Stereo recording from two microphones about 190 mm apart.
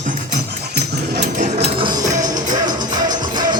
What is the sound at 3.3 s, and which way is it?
Music, 25° right (ahead or behind).